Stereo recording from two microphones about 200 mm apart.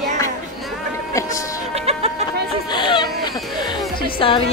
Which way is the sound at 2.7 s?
25° left (ahead or behind).